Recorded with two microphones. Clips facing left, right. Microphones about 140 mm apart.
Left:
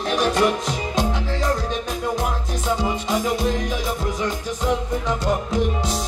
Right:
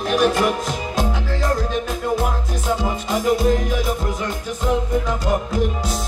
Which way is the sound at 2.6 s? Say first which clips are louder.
Even; centre (ahead or behind).